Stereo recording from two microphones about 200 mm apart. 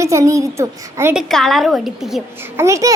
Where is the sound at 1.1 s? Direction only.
Centre (ahead or behind).